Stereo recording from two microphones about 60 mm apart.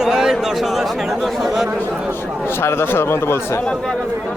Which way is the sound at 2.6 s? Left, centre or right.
Left.